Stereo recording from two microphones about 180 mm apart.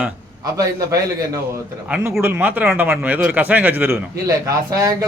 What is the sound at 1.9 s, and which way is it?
Speech, 15° right (ahead or behind).